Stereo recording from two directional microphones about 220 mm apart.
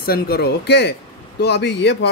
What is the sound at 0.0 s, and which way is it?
Speech, 45° left (ahead or behind).